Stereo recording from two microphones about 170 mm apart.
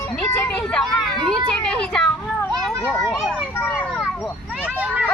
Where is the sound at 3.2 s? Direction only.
5° right (ahead or behind).